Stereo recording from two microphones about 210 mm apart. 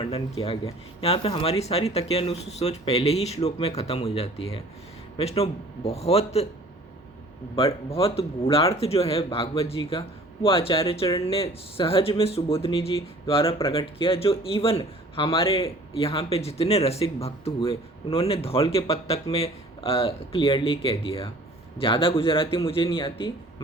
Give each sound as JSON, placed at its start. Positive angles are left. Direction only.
{"t": 0.0, "sound": "speech", "side_deg": 25}
{"t": 7.5, "sound": "speech", "side_deg": 25}